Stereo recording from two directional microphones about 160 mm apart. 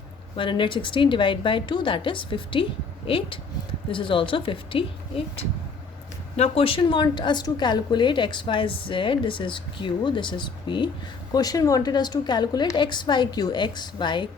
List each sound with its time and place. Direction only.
0.3 s a woman's voice: 30° left (ahead or behind)